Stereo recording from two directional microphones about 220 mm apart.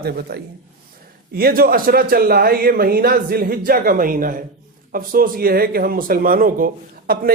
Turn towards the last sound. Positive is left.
turn(degrees=-40)  # may be behind; listen again after turning